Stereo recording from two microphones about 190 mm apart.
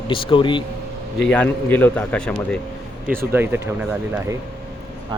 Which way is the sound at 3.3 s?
10° right (ahead or behind).